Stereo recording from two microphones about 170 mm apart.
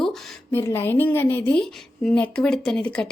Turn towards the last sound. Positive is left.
turn(degrees=5)  # may be behind; listen again after turning